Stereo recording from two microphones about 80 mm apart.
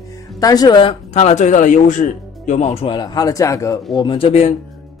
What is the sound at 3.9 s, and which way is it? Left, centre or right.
Speech, left.